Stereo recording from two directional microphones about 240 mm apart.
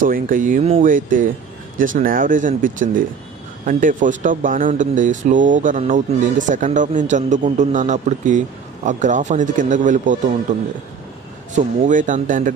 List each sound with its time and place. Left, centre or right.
0.0 s speech: right
11.5 s speech: right